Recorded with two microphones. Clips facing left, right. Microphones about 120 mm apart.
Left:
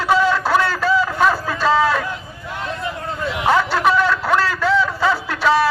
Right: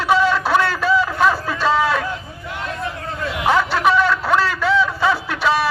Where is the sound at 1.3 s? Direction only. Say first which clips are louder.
Left 1 dB; centre (ahead or behind).